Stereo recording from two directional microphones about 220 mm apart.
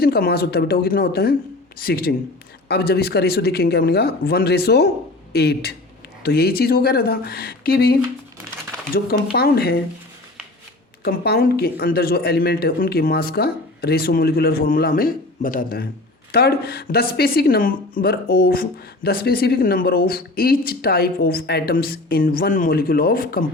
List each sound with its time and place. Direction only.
0.0 s speech: 45° left (ahead or behind)
9.3 s speech: 45° left (ahead or behind)
11.0 s speech: 45° left (ahead or behind)